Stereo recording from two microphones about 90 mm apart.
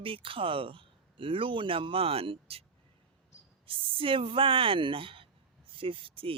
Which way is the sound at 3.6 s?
75° right (ahead or behind).